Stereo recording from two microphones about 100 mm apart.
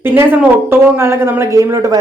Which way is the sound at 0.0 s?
20° right (ahead or behind).